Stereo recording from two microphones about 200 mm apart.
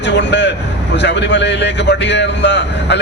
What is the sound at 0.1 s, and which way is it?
A man's voice, 60° left (ahead or behind).